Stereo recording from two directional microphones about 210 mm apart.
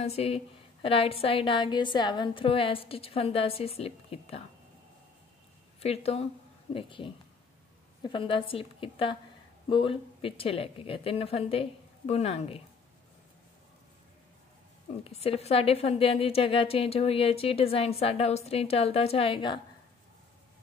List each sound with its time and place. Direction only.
0.0 s a woman's voice: 30° left (ahead or behind)
5.8 s a woman's voice: 30° left (ahead or behind)
15.0 s a woman's voice: 30° left (ahead or behind)